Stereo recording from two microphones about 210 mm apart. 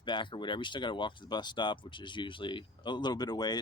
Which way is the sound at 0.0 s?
20° left (ahead or behind).